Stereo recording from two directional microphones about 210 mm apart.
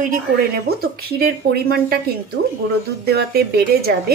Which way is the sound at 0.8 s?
45° right (ahead or behind).